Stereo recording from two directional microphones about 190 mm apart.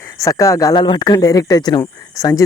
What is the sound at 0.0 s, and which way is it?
Speech, 15° left (ahead or behind).